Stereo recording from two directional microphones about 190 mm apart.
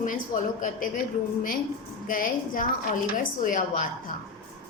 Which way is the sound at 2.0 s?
45° left (ahead or behind).